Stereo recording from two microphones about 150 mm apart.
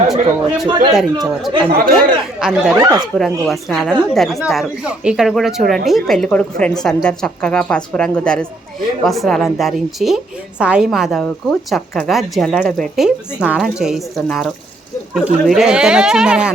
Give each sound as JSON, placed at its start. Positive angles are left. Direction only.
{"t": 0.1, "sound": "a woman's voice", "side_deg": 0}
{"t": 2.7, "sound": "speech", "side_deg": -30}
{"t": 3.2, "sound": "a woman's voice", "side_deg": 0}